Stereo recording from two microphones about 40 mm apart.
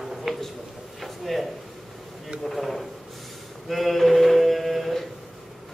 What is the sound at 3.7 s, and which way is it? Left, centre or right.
Mantra, centre.